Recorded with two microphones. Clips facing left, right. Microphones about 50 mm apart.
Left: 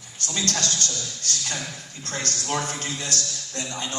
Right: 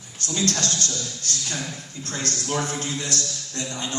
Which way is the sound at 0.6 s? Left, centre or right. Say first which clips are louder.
Right 1 dB; right.